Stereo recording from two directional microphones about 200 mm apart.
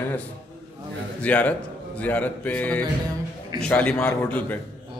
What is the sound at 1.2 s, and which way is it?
A man's voice, 5° left (ahead or behind).